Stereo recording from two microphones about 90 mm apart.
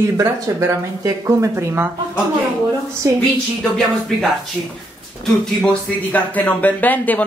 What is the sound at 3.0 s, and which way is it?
Speech, 40° right (ahead or behind).